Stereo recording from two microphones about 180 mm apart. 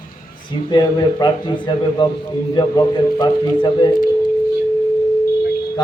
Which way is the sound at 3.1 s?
25° left (ahead or behind).